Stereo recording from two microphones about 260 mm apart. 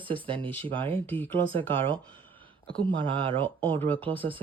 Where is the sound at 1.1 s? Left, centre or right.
Centre.